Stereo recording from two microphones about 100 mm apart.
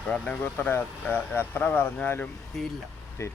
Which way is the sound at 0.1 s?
15° left (ahead or behind).